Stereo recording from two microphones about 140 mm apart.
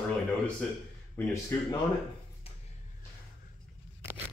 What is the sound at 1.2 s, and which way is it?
Speech, 15° left (ahead or behind).